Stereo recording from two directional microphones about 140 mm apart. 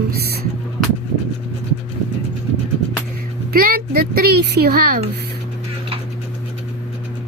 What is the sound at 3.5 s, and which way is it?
Speech, 90° right.